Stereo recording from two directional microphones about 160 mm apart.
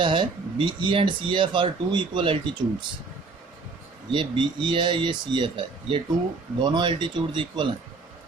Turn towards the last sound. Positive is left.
turn(degrees=-30)  # may be behind; listen again after turning